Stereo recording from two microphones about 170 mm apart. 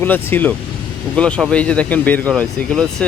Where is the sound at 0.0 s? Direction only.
10° left (ahead or behind).